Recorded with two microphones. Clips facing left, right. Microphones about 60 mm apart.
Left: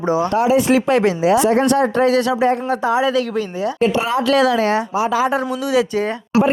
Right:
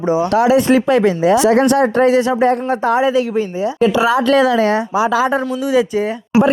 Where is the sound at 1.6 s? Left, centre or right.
Right.